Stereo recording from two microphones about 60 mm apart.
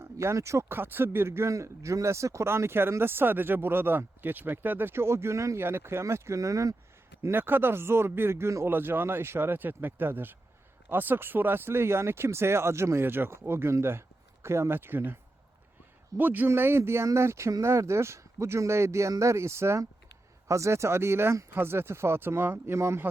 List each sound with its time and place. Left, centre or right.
0.0 s speech: right
0.7 s speech: right
5.5 s speech: right
7.3 s speech: right
8.7 s speech: right